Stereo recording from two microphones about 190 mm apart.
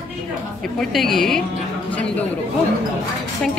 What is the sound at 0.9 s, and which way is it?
Speech, centre (ahead or behind).